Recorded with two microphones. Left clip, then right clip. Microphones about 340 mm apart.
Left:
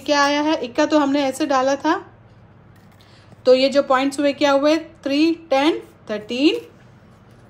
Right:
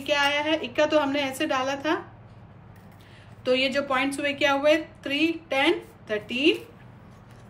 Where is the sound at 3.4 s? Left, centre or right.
Centre.